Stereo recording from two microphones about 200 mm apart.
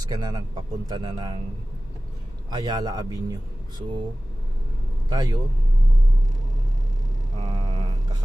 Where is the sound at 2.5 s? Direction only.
20° right (ahead or behind).